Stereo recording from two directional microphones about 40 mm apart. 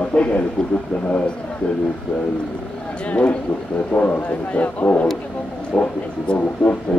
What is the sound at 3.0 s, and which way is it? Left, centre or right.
Speech, left.